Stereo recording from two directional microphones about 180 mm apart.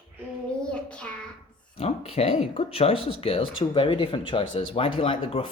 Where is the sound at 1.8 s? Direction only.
35° left (ahead or behind).